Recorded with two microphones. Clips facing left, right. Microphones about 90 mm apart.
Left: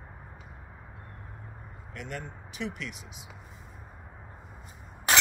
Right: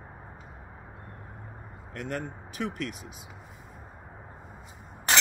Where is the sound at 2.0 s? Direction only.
45° right (ahead or behind).